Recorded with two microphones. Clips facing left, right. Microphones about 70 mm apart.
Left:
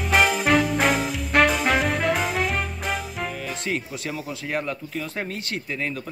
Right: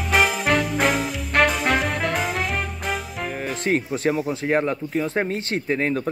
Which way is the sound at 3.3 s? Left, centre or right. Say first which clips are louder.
Right 9 dB; right.